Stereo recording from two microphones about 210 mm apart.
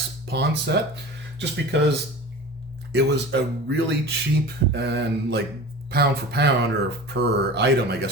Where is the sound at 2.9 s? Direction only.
55° right (ahead or behind).